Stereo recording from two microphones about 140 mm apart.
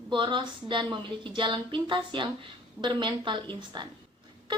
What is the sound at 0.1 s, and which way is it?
A woman's voice, 35° right (ahead or behind).